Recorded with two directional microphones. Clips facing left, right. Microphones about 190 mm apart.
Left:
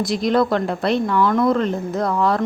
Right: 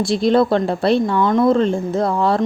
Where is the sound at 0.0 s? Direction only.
30° right (ahead or behind).